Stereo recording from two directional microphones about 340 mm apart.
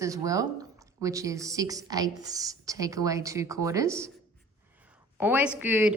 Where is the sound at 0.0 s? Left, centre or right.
Centre.